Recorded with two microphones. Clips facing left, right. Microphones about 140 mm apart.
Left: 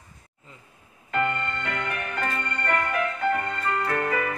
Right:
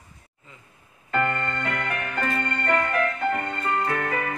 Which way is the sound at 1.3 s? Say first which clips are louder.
Right 2 dB; 45° right (ahead or behind).